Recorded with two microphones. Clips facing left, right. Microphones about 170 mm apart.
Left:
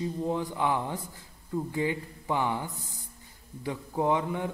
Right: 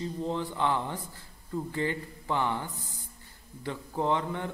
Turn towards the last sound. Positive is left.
turn(degrees=10)  # may be behind; listen again after turning